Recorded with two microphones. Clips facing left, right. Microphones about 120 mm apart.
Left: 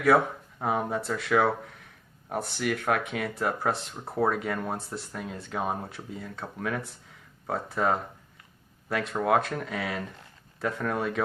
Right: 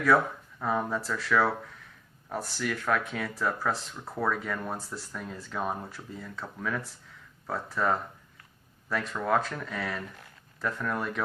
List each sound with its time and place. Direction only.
0.6 s speech: 65° left (ahead or behind)